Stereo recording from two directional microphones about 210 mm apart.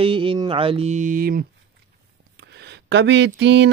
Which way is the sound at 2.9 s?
60° right (ahead or behind).